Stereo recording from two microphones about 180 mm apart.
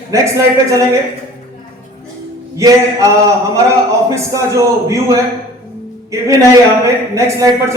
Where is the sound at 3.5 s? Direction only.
15° right (ahead or behind).